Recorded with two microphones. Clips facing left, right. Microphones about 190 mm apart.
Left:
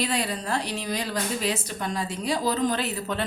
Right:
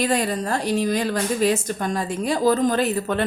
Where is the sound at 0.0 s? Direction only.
50° right (ahead or behind).